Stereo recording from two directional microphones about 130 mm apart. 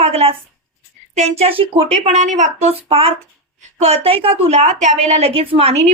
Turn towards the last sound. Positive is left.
turn(degrees=-50)  # may be behind; listen again after turning